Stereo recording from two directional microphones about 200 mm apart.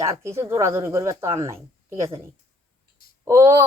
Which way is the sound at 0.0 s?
15° right (ahead or behind).